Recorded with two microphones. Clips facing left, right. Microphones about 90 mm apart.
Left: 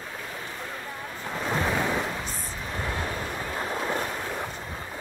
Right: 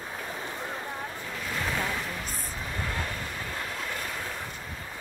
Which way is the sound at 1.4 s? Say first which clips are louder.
Left 5 dB; 30° left (ahead or behind).